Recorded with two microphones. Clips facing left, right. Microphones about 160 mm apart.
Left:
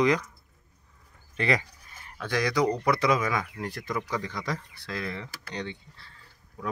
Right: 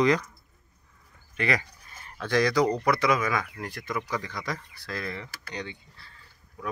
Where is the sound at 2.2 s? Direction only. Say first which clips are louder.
Right 3 dB; 15° left (ahead or behind).